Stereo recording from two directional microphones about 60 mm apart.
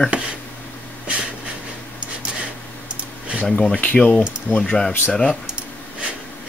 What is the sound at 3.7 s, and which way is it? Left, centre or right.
Speech, left.